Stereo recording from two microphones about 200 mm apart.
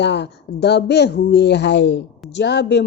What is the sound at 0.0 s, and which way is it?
Speech, 60° left (ahead or behind).